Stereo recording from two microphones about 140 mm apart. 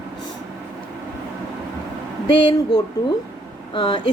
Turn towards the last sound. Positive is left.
turn(degrees=35)  # may be behind; listen again after turning